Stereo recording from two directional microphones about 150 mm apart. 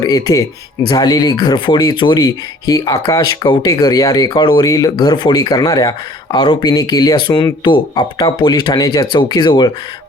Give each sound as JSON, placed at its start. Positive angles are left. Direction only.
{"t": 0.0, "sound": "speech", "side_deg": 25}